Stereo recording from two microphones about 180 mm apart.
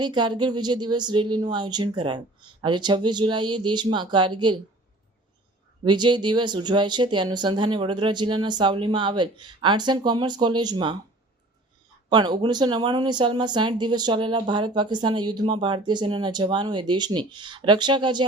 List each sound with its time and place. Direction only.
0.0 s speech: 25° right (ahead or behind)
5.8 s speech: 25° right (ahead or behind)
12.1 s speech: 25° right (ahead or behind)